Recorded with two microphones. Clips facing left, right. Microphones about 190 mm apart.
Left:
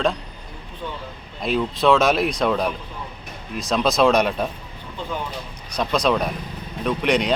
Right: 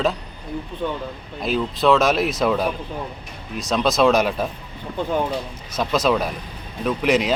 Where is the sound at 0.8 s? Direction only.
65° right (ahead or behind).